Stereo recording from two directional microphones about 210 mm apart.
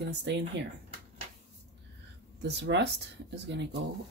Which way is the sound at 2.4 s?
55° right (ahead or behind).